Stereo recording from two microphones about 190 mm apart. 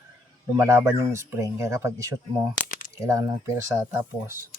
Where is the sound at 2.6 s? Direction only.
45° left (ahead or behind).